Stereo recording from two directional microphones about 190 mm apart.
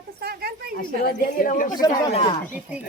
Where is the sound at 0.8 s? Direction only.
50° left (ahead or behind).